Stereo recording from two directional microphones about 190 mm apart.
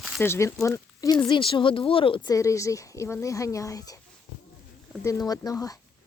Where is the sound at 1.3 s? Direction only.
25° left (ahead or behind).